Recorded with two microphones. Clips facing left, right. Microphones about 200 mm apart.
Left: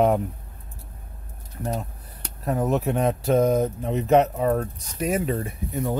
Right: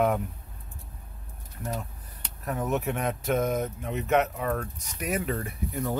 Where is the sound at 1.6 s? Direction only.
35° left (ahead or behind).